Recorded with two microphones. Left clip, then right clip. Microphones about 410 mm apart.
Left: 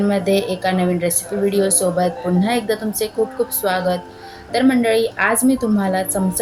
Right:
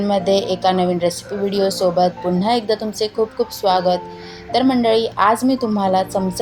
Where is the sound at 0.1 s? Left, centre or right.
Left.